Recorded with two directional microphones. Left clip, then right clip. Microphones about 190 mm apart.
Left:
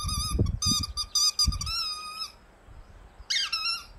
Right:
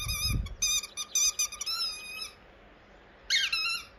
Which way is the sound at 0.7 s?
55° left (ahead or behind).